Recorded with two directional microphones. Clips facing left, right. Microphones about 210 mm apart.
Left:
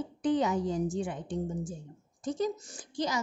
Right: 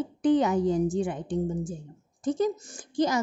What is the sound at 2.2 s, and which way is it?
A woman's voice, 55° right (ahead or behind).